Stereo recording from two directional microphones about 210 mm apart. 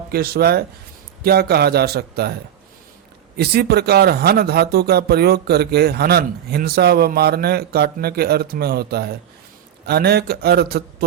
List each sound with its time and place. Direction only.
0.1 s speech: 50° right (ahead or behind)
3.3 s speech: 50° right (ahead or behind)